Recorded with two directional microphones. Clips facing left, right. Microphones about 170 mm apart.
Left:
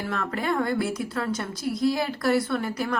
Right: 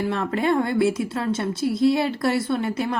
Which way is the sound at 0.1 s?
25° right (ahead or behind).